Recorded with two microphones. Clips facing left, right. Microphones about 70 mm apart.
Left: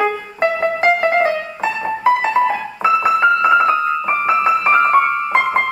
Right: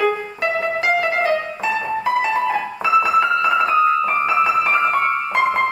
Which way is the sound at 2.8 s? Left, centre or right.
Left.